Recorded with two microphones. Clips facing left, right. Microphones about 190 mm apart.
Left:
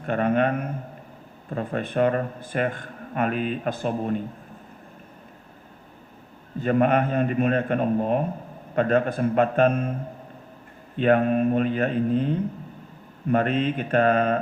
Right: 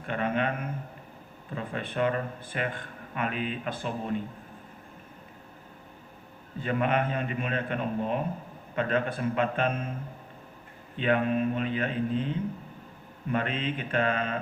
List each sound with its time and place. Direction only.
0.0 s a man's voice: 45° left (ahead or behind)
6.6 s a man's voice: 45° left (ahead or behind)
10.9 s a man's voice: 45° left (ahead or behind)